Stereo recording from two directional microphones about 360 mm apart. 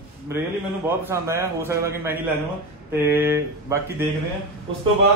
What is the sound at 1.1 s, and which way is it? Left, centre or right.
A man's voice, centre.